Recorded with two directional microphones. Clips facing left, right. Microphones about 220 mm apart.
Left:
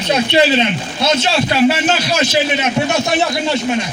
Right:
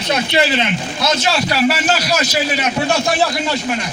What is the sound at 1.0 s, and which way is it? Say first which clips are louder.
A man's voice: left 3 dB; 25° left (ahead or behind).